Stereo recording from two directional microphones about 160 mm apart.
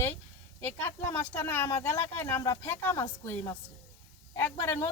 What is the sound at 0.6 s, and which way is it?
Speech, 15° left (ahead or behind).